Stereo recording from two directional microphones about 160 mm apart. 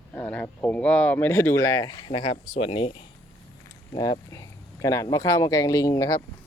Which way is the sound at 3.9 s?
25° left (ahead or behind).